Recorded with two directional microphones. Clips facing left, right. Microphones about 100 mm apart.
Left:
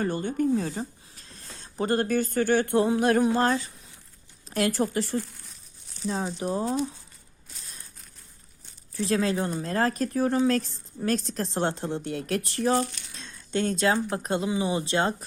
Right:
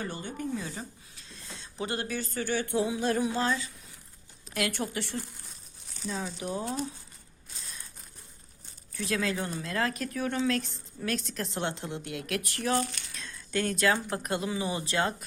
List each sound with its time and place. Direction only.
0.0 s speech: 50° left (ahead or behind)
0.7 s speech: 40° left (ahead or behind)
4.4 s a woman's voice: 35° left (ahead or behind)
9.0 s a woman's voice: 35° left (ahead or behind)